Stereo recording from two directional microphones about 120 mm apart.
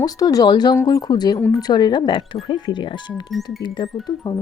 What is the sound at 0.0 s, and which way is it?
Speech, 30° left (ahead or behind).